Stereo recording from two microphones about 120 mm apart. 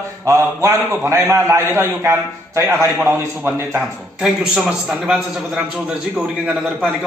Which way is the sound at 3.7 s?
5° right (ahead or behind).